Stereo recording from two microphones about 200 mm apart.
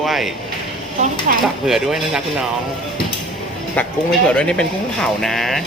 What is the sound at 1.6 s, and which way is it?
Speech, centre (ahead or behind).